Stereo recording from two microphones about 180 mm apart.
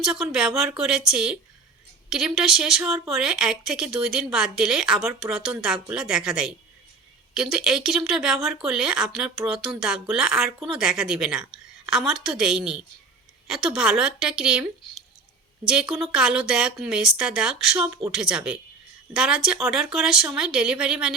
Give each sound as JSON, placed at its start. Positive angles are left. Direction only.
{"t": 0.0, "sound": "speech", "side_deg": -5}
{"t": 15.6, "sound": "speech", "side_deg": -5}
{"t": 17.8, "sound": "speech", "side_deg": -15}
{"t": 18.1, "sound": "speech", "side_deg": -5}